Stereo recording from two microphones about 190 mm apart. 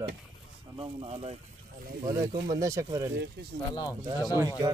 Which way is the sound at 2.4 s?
15° right (ahead or behind).